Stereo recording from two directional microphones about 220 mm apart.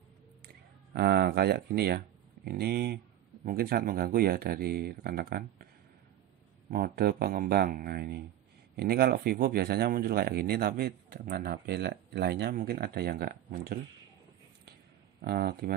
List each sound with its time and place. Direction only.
0.9 s speech: 45° right (ahead or behind)
6.7 s speech: 40° right (ahead or behind)
15.2 s speech: 45° right (ahead or behind)